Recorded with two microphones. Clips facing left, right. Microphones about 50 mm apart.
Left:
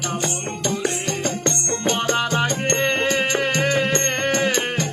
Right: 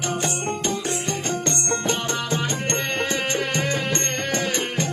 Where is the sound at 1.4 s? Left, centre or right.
Left.